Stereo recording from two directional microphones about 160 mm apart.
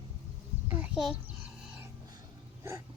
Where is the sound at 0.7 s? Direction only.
10° right (ahead or behind).